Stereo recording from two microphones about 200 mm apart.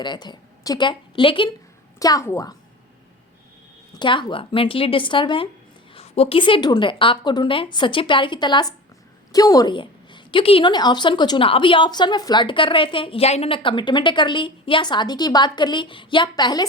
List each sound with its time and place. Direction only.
0.0 s a woman's voice: 20° left (ahead or behind)
3.9 s a woman's voice: 25° left (ahead or behind)